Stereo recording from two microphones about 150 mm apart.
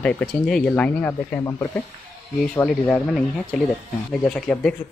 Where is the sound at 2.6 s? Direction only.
10° left (ahead or behind).